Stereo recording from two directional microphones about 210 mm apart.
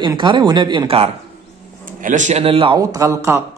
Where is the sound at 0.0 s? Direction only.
20° right (ahead or behind).